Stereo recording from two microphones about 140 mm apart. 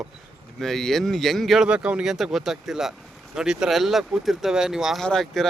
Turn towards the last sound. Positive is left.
turn(degrees=5)  # may be behind; listen again after turning